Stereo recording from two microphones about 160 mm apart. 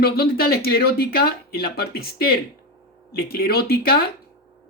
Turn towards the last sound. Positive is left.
turn(degrees=70)  # may be behind; listen again after turning